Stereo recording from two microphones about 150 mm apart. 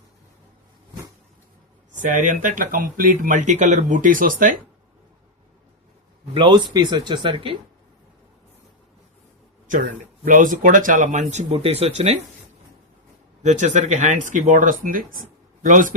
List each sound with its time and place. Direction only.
2.0 s speech: 60° right (ahead or behind)
6.3 s speech: 30° right (ahead or behind)
10.2 s speech: 60° right (ahead or behind); by 12.2 s 45° right (ahead or behind)
13.4 s speech: 55° right (ahead or behind)